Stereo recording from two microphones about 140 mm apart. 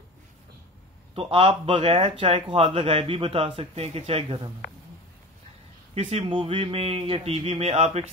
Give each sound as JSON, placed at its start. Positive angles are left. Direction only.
{"t": 1.1, "sound": "speech", "side_deg": -40}
{"t": 5.9, "sound": "speech", "side_deg": -45}